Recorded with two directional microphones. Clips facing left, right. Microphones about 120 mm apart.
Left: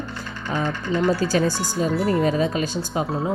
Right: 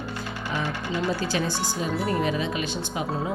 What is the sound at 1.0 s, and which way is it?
Speech, 45° left (ahead or behind).